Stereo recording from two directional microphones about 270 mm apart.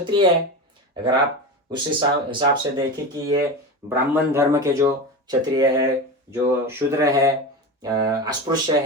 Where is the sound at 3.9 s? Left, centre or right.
Centre.